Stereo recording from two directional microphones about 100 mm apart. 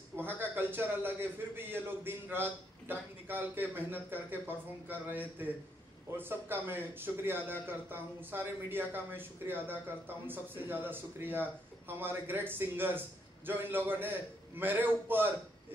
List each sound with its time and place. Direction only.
0.1 s a man's voice: 20° right (ahead or behind)